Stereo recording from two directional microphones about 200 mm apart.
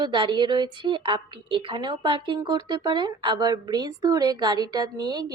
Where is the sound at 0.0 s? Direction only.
25° right (ahead or behind).